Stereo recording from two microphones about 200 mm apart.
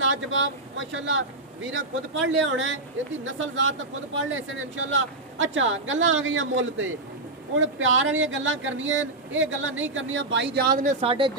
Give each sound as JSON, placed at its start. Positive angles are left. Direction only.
{"t": 0.0, "sound": "speech", "side_deg": -70}